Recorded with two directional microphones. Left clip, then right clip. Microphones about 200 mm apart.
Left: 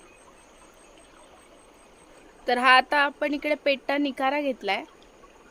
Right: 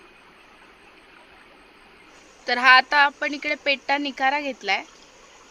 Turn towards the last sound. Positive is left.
turn(degrees=60)  # may be behind; listen again after turning